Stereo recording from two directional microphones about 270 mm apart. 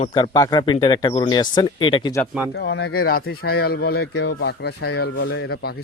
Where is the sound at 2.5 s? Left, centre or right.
Left.